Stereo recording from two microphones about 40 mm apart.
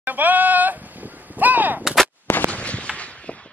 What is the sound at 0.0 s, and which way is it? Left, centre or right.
Goat, right.